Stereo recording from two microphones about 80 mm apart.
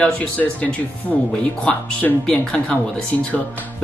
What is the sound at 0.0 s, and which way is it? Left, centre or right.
Speech, centre.